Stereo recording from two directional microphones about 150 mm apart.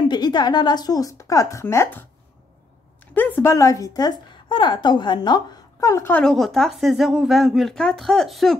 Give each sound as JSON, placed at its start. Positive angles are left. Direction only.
{"t": 0.0, "sound": "a woman's voice", "side_deg": 30}
{"t": 3.2, "sound": "a woman's voice", "side_deg": 15}
{"t": 6.2, "sound": "speech", "side_deg": 0}